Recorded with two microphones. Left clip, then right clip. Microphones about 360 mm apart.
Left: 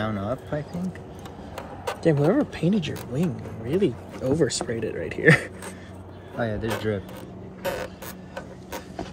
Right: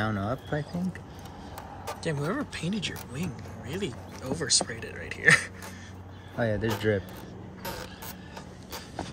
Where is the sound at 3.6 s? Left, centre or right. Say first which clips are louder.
Left 11 dB; centre.